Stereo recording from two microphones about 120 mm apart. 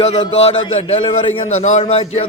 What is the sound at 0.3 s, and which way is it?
A man's voice, 60° left (ahead or behind).